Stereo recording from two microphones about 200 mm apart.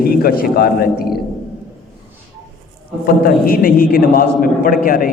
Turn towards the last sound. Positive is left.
turn(degrees=45)  # may be behind; listen again after turning